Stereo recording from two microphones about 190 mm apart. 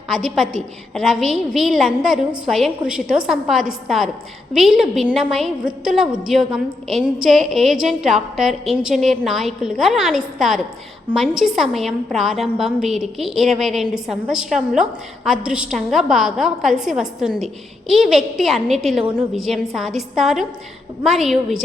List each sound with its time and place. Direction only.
0.1 s a woman's voice: centre (ahead or behind)